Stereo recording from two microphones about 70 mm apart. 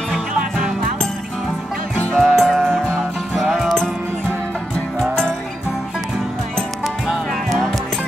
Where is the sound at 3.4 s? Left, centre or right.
Centre.